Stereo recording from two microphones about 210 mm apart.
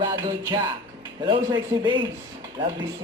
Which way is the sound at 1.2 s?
20° right (ahead or behind).